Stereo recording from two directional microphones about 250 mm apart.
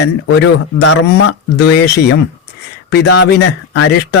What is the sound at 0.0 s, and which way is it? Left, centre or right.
Speech, left.